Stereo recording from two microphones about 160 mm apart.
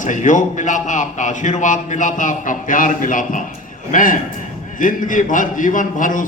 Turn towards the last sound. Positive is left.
turn(degrees=55)  # may be behind; listen again after turning